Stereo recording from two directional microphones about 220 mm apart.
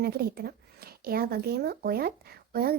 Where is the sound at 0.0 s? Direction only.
45° right (ahead or behind).